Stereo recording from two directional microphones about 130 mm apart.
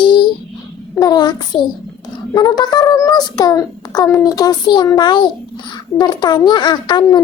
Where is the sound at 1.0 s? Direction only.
30° left (ahead or behind).